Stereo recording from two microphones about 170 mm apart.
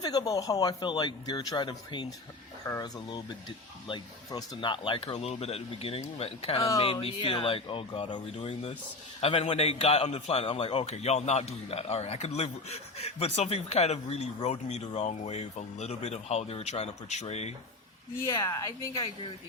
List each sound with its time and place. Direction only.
0.0 s a man's voice: 20° left (ahead or behind); by 17.5 s 40° left (ahead or behind)
18.2 s a man's voice: 20° left (ahead or behind)